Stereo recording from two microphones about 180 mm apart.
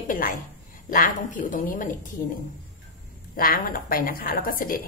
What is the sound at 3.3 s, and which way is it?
A woman's voice, 55° left (ahead or behind).